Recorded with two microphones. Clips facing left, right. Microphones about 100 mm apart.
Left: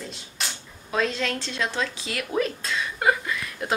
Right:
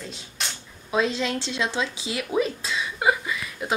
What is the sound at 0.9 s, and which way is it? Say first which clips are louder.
Speech: right 2 dB; 15° right (ahead or behind).